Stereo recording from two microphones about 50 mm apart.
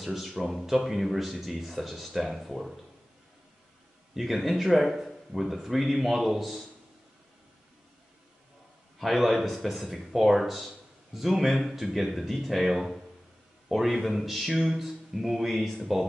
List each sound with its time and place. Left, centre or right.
0.0 s speech: centre
4.1 s speech: centre
9.0 s speech: centre